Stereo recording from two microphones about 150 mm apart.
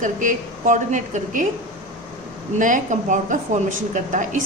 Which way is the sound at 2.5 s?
60° right (ahead or behind).